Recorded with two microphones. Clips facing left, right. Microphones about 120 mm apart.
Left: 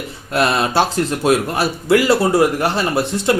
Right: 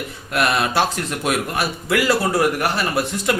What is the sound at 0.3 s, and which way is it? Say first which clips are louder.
Speech: left 3 dB; 25° left (ahead or behind).